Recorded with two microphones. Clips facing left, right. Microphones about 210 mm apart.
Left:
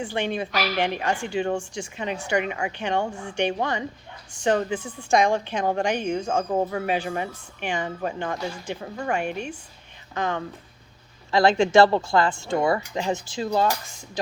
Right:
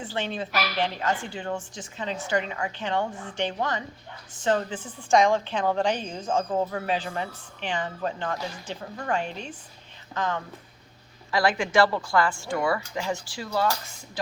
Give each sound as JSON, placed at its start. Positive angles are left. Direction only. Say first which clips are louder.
{"t": 0.0, "sound": "a woman's voice", "louder": "left 4 dB", "side_deg": 15}
{"t": 6.1, "sound": "speech", "louder": "left 7 dB", "side_deg": 70}
{"t": 6.3, "sound": "a woman's voice", "louder": "right 2 dB", "side_deg": 10}